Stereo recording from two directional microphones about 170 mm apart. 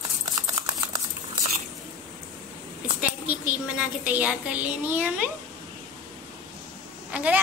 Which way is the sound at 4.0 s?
10° right (ahead or behind).